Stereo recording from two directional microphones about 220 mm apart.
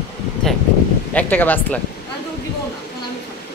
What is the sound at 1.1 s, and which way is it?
Speech, 10° left (ahead or behind).